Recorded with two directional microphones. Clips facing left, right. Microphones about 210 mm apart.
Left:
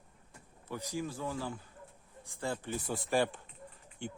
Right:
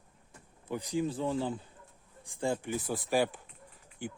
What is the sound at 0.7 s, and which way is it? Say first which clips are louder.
A man's voice: right 6 dB; 15° right (ahead or behind).